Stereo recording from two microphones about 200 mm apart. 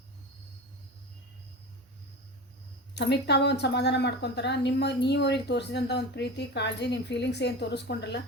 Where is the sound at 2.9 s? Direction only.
60° left (ahead or behind).